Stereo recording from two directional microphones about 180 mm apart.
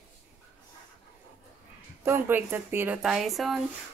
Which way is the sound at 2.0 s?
10° right (ahead or behind).